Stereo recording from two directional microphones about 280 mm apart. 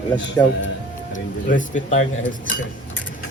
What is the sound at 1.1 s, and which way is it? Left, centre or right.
Speech, left.